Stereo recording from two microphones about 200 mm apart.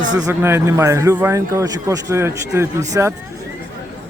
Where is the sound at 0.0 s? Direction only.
20° right (ahead or behind).